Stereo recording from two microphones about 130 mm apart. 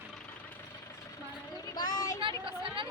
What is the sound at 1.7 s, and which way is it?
Speech, 35° left (ahead or behind).